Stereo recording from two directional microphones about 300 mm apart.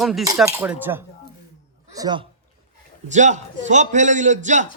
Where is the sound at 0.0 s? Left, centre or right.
Centre.